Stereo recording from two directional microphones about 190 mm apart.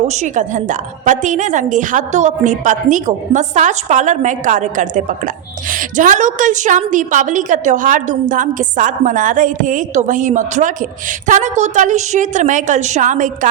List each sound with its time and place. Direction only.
0.1 s a woman's voice: 40° right (ahead or behind)